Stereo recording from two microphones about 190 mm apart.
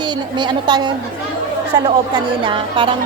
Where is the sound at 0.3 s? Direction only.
25° right (ahead or behind).